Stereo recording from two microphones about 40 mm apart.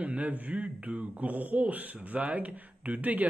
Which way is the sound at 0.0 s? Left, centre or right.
Right.